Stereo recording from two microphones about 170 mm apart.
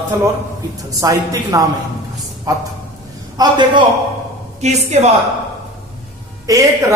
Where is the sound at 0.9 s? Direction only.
20° right (ahead or behind).